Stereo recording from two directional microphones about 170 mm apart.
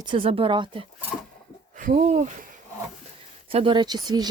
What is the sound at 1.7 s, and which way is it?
Speech, 50° right (ahead or behind).